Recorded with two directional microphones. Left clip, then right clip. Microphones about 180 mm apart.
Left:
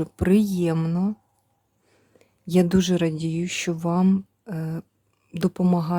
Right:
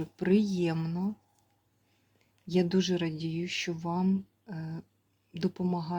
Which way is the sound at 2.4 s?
45° left (ahead or behind).